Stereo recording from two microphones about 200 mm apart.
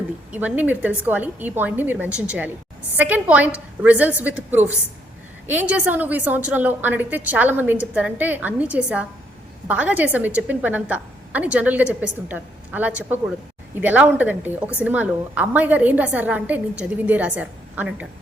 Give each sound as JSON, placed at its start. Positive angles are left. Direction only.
{"t": 0.3, "sound": "a woman's voice", "side_deg": -5}